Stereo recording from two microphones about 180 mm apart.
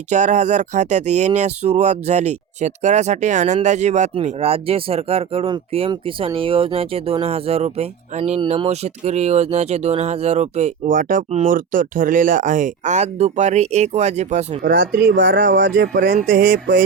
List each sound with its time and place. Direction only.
0.1 s speech: 40° right (ahead or behind)
14.6 s speech: 70° right (ahead or behind)